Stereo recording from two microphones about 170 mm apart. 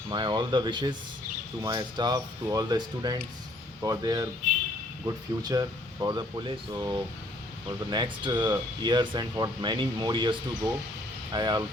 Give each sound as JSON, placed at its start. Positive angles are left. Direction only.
{"t": 0.1, "sound": "speech", "side_deg": -25}